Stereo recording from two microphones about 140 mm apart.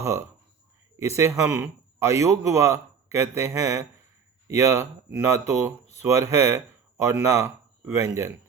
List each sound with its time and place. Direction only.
0.0 s a man's voice: 20° right (ahead or behind)